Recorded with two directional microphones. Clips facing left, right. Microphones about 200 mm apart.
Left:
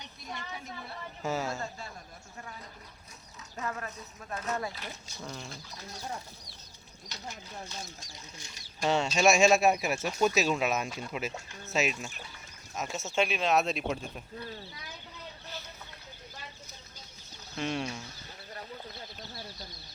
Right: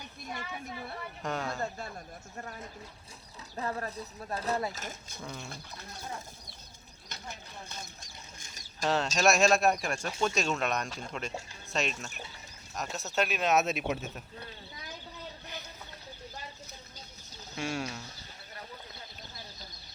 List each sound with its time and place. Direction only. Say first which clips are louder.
1.2 s speech: left 2 dB; 5° left (ahead or behind)
3.6 s speech: right 2 dB; 35° right (ahead or behind)
4.7 s speech: right 1 dB; 45° right (ahead or behind)
5.2 s speech: left 1 dB; 5° right (ahead or behind)
7.1 s speech: left 2 dB; 55° right (ahead or behind)
8.8 s speech: left 2 dB; centre (ahead or behind)
17.6 s speech: left 1 dB; 5° right (ahead or behind)